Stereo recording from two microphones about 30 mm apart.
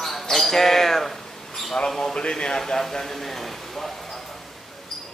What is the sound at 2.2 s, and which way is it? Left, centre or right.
Speech, left.